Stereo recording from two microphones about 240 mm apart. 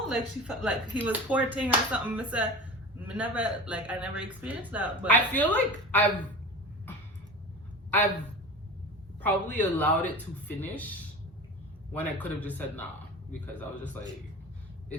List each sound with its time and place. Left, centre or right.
0.1 s speech: centre
5.0 s a woman's voice: centre
9.2 s a woman's voice: centre
11.9 s a woman's voice: centre